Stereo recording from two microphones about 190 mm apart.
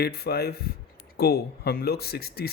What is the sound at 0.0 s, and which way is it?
Speech, 55° left (ahead or behind).